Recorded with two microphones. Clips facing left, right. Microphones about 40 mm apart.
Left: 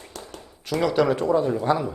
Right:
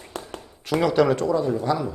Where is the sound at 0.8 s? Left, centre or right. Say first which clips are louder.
Right 1 dB; centre.